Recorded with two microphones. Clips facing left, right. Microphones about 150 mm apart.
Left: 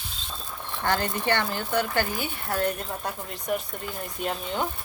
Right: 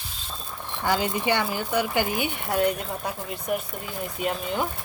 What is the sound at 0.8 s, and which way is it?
Speech, 10° right (ahead or behind).